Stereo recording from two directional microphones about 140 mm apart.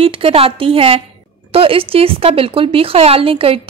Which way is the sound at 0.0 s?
45° right (ahead or behind).